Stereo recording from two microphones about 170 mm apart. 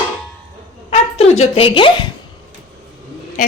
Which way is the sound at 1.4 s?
35° left (ahead or behind).